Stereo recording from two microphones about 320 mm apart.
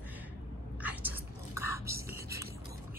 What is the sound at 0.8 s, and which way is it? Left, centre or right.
Whispering, centre.